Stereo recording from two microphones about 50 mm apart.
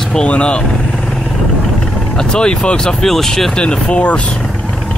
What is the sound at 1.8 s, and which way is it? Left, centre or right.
Speech, centre.